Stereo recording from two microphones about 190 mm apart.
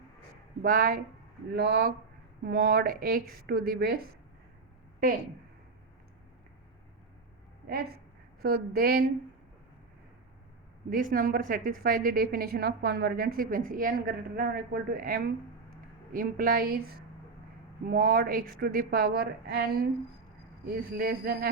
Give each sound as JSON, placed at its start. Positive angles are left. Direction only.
{"t": 0.6, "sound": "a woman's voice", "side_deg": -50}
{"t": 8.4, "sound": "a woman's voice", "side_deg": -50}
{"t": 10.8, "sound": "a woman's voice", "side_deg": -45}